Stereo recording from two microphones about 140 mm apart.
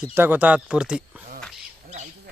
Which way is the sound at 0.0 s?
15° right (ahead or behind).